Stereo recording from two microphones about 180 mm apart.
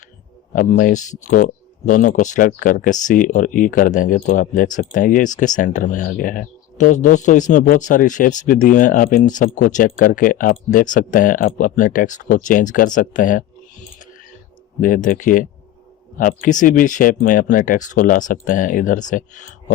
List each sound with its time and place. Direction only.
0.5 s a man's voice: 45° left (ahead or behind)
14.8 s a man's voice: 45° left (ahead or behind)